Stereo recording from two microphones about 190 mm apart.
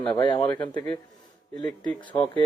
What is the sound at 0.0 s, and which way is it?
Speech, 25° left (ahead or behind).